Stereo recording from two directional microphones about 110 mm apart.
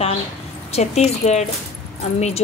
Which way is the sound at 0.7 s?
80° left.